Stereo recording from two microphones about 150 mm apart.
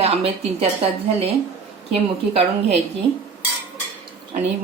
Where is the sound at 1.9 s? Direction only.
40° right (ahead or behind).